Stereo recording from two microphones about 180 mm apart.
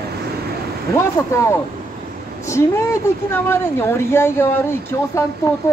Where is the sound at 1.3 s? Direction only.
15° left (ahead or behind).